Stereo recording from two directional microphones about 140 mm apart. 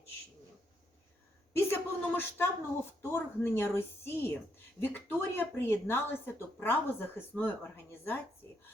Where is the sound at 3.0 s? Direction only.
15° left (ahead or behind).